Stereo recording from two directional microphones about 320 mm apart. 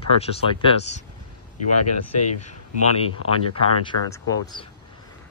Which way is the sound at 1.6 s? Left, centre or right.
Left.